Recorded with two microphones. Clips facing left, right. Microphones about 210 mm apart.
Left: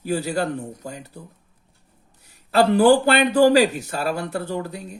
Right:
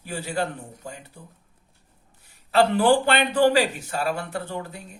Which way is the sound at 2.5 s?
40° left (ahead or behind).